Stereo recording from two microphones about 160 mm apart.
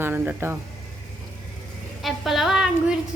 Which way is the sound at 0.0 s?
15° right (ahead or behind).